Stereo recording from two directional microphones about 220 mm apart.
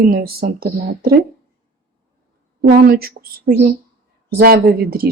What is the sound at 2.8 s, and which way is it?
A woman's voice, 45° right (ahead or behind).